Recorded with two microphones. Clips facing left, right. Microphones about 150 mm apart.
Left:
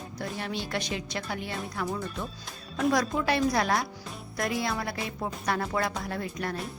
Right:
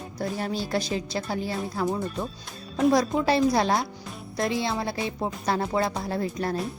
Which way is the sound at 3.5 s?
25° right (ahead or behind).